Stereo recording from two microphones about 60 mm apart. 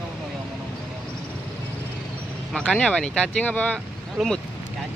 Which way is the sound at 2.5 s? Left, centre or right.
Centre.